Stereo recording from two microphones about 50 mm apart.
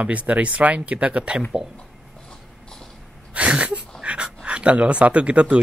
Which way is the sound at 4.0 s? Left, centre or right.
Right.